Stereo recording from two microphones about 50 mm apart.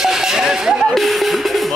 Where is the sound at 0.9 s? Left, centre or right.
Centre.